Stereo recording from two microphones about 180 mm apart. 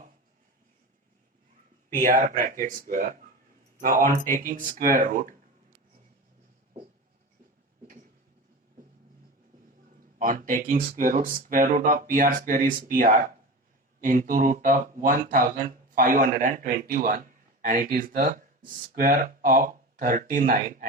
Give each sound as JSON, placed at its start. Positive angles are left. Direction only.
{"t": 1.9, "sound": "speech", "side_deg": -50}
{"t": 10.2, "sound": "speech", "side_deg": -50}